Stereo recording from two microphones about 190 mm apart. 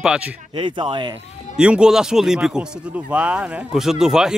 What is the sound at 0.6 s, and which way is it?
Speech, 25° right (ahead or behind).